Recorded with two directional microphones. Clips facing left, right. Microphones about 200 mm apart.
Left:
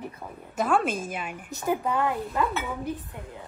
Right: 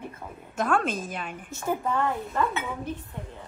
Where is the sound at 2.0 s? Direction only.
5° left (ahead or behind).